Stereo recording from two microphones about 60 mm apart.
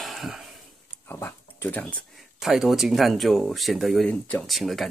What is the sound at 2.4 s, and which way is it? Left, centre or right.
Speech, centre.